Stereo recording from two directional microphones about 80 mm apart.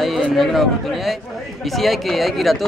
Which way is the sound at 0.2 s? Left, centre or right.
Centre.